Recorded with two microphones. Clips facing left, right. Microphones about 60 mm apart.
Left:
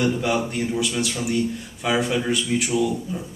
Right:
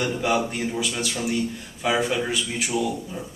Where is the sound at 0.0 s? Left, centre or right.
Centre.